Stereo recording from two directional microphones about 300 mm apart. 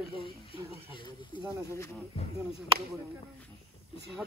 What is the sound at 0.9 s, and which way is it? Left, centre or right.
Speech, centre.